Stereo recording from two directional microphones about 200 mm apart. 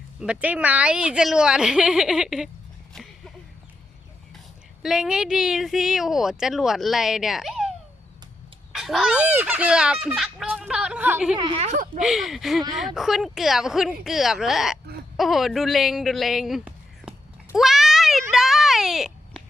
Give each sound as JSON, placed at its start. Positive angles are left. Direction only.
{"t": 0.2, "sound": "speech", "side_deg": -5}
{"t": 2.9, "sound": "a sound", "side_deg": 0}
{"t": 4.8, "sound": "speech", "side_deg": -5}
{"t": 8.7, "sound": "speech", "side_deg": 0}
{"t": 11.3, "sound": "a woman's voice", "side_deg": -25}
{"t": 11.9, "sound": "speech", "side_deg": 0}
{"t": 15.1, "sound": "a sound", "side_deg": 0}